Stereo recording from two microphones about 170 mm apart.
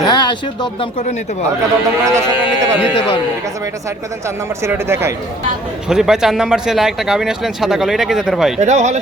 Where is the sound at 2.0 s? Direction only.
15° right (ahead or behind).